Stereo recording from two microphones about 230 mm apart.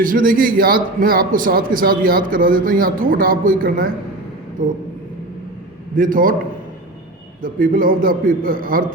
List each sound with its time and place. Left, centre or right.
0.0 s a man's voice: right
6.0 s a man's voice: right
7.4 s a man's voice: right